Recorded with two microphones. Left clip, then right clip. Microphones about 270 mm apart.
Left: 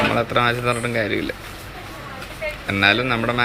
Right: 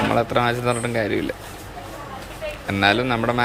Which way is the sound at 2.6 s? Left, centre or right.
Centre.